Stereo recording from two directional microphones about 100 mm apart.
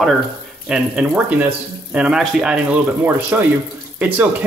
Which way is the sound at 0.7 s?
10° right (ahead or behind).